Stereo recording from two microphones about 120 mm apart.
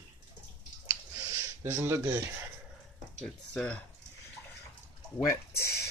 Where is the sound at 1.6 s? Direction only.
25° right (ahead or behind).